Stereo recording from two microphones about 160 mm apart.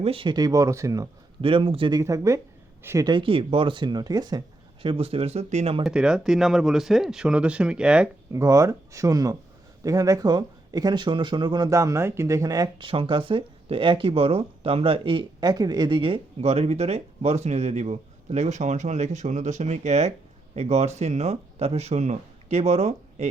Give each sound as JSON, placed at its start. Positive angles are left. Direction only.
{"t": 0.0, "sound": "speech", "side_deg": -35}
{"t": 1.4, "sound": "speech", "side_deg": -35}
{"t": 2.0, "sound": "speech", "side_deg": -20}
{"t": 3.1, "sound": "speech", "side_deg": -30}
{"t": 5.8, "sound": "speech", "side_deg": -5}
{"t": 8.3, "sound": "speech", "side_deg": -20}